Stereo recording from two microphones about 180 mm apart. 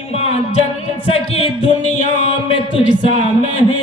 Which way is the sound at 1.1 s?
35° left (ahead or behind).